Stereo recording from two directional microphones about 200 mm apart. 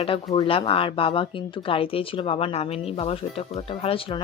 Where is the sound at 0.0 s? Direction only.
25° left (ahead or behind).